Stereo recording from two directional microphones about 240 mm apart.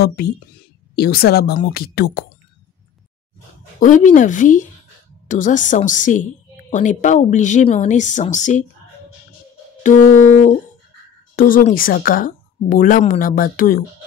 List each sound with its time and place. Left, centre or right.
0.0 s a woman's voice: left
3.8 s a woman's voice: left
9.8 s a woman's voice: left